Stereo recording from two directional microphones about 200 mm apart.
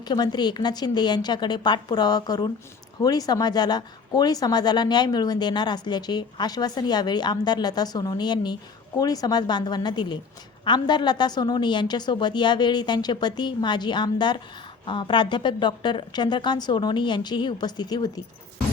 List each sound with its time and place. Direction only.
0.0 s speech: 20° left (ahead or behind)